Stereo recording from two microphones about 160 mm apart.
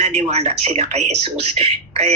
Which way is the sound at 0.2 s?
40° right (ahead or behind).